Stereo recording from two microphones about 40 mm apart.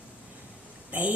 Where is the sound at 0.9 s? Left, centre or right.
Right.